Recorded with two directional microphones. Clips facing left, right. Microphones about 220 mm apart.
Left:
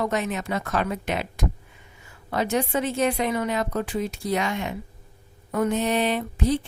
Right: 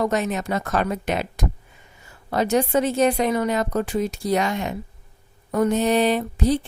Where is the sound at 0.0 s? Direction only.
40° right (ahead or behind).